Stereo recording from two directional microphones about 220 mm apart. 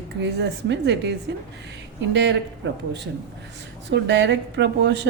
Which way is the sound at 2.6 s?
55° right (ahead or behind).